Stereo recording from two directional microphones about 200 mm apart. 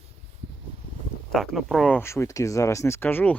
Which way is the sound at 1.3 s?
Centre (ahead or behind).